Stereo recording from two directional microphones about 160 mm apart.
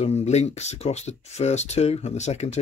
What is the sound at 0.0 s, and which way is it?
Speech, 45° left (ahead or behind).